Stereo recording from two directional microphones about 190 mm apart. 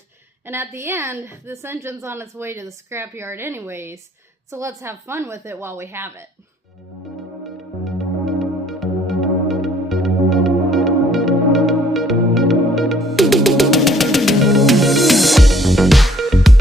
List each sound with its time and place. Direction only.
0.4 s a woman's voice: 10° right (ahead or behind)
7.0 s music: centre (ahead or behind)